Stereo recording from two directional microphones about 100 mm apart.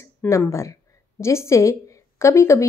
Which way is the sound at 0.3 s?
30° left (ahead or behind).